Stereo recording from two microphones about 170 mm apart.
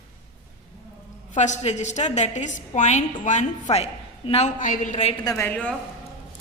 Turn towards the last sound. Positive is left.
turn(degrees=10)  # may be behind; listen again after turning